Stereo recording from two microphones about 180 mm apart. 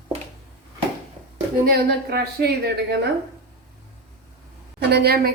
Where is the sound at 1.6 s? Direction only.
60° right (ahead or behind).